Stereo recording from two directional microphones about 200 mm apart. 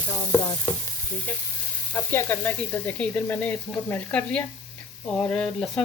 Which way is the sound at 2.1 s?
10° left (ahead or behind).